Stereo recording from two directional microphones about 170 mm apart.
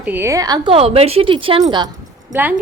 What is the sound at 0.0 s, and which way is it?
A woman's voice, 10° right (ahead or behind).